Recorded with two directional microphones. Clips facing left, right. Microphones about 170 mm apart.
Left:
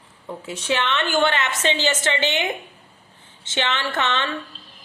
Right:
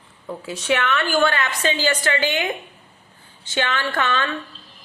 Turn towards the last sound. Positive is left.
turn(degrees=20)  # may be behind; listen again after turning